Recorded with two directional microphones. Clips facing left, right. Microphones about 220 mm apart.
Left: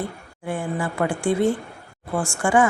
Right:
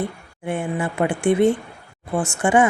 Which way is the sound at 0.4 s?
20° right (ahead or behind).